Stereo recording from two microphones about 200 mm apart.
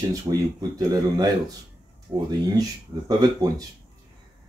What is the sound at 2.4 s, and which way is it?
Speech, 20° right (ahead or behind).